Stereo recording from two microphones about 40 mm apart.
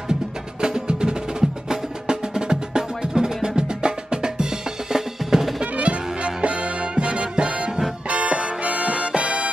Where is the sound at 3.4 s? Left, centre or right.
Right.